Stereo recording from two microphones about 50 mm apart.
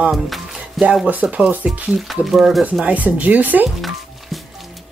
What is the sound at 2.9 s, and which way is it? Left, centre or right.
Speech, right.